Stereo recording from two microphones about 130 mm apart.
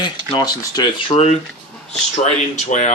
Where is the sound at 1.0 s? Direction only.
55° left (ahead or behind).